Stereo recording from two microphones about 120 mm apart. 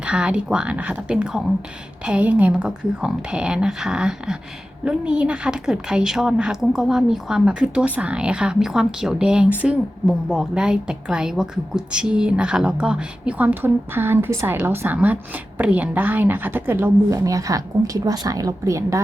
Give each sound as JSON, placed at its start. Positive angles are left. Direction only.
{"t": 0.0, "sound": "a woman's voice", "side_deg": -10}